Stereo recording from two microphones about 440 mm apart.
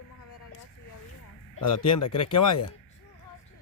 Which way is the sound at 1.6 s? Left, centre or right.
Left.